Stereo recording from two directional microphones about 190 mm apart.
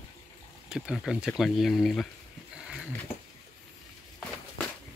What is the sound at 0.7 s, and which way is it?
Speech, 5° right (ahead or behind).